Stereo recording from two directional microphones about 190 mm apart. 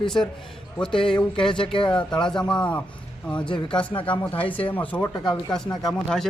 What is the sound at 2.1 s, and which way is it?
Speech, 5° left (ahead or behind).